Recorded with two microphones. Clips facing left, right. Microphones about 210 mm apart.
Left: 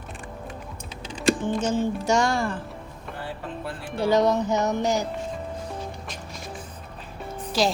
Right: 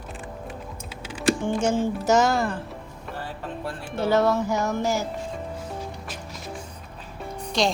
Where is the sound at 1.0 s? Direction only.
10° right (ahead or behind).